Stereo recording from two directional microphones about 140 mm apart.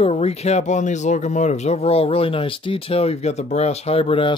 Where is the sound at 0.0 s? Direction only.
50° left (ahead or behind).